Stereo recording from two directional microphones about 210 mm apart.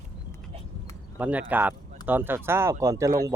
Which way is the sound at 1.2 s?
5° right (ahead or behind).